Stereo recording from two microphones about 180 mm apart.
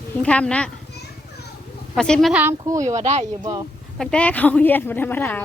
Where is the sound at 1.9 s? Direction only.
5° left (ahead or behind).